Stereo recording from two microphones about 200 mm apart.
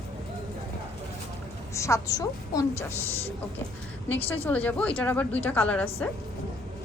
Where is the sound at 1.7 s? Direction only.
15° left (ahead or behind).